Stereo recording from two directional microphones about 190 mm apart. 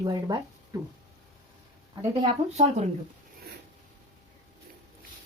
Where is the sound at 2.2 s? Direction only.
35° right (ahead or behind).